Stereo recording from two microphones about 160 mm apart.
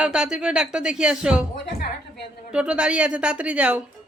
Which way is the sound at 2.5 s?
5° right (ahead or behind).